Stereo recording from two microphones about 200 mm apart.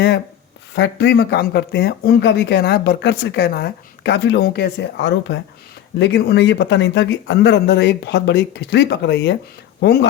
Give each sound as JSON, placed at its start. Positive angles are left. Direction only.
{"t": 0.7, "sound": "speech", "side_deg": 60}